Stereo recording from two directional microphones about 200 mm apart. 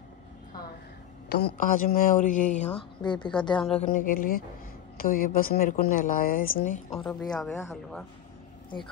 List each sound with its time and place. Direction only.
1.3 s speech: 50° left (ahead or behind)
3.0 s a woman's voice: 20° left (ahead or behind)
3.9 s speech: 45° left (ahead or behind)
6.9 s a man's voice: centre (ahead or behind)